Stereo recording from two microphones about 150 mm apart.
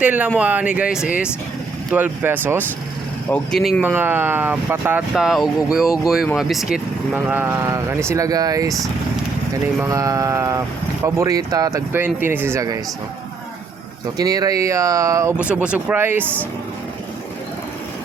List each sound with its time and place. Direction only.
0.0 s speech: 10° right (ahead or behind)
3.2 s speech: 5° left (ahead or behind)
3.8 s speech: 15° right (ahead or behind)
5.1 s speech: centre (ahead or behind); by 8.7 s 25° right (ahead or behind)
9.8 s speech: 20° right (ahead or behind)
14.2 s speech: 25° right (ahead or behind)
15.4 s speech: 10° right (ahead or behind)